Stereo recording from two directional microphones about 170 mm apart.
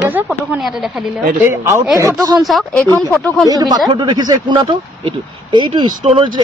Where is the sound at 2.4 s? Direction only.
Centre (ahead or behind).